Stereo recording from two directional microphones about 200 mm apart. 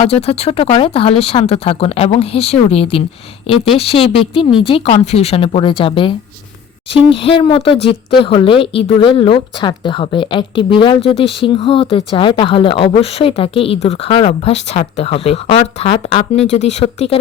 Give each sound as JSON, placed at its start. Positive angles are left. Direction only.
{"t": 0.1, "sound": "a woman's voice", "side_deg": 30}